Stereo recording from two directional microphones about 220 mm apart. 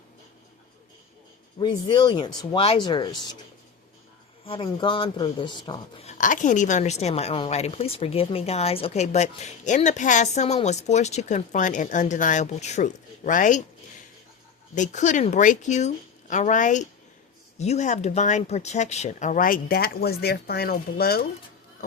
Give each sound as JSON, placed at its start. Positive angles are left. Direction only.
{"t": 1.5, "sound": "speech", "side_deg": 20}
{"t": 4.4, "sound": "a woman's voice", "side_deg": 25}
{"t": 14.8, "sound": "a woman's voice", "side_deg": 35}